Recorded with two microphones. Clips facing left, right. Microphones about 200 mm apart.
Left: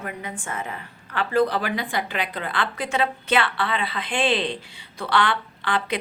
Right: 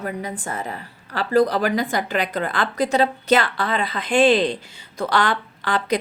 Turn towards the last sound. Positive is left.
turn(degrees=-40)  # may be behind; listen again after turning